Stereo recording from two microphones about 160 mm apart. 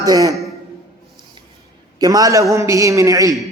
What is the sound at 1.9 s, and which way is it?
A man's voice, 25° right (ahead or behind).